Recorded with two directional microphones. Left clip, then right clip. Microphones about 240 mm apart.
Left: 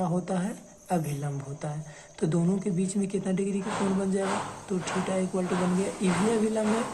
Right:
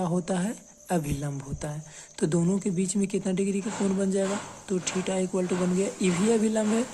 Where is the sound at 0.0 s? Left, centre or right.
Right.